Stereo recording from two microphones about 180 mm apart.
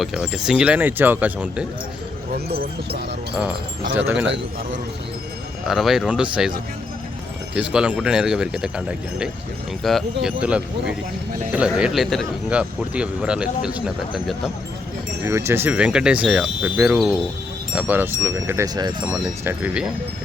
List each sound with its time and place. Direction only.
0.0 s speech: centre (ahead or behind)
2.5 s speech: 60° right (ahead or behind)
3.9 s speech: 10° right (ahead or behind)
5.6 s speech: centre (ahead or behind)
7.5 s speech: 5° right (ahead or behind)
15.2 s speech: 15° right (ahead or behind)